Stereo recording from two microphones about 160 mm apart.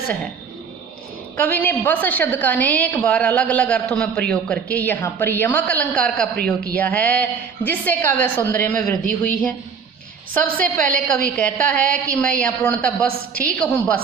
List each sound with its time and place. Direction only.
1.4 s a woman's voice: 10° left (ahead or behind)
6.3 s speech: 70° right (ahead or behind)
6.7 s a woman's voice: 10° left (ahead or behind)